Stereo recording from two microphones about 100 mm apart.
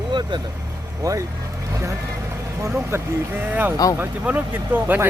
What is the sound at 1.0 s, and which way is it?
Speech, 35° right (ahead or behind).